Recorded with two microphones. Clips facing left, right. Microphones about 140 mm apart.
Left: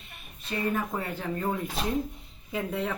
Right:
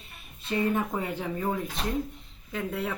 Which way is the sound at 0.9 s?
15° right (ahead or behind).